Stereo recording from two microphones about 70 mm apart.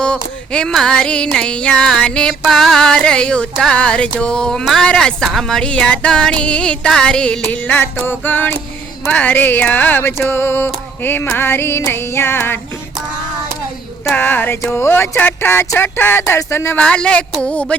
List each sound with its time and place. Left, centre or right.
0.0 s a sound: centre
0.7 s music: centre
7.5 s music: left
10.2 s speech: left
14.1 s speech: left
16.7 s music: centre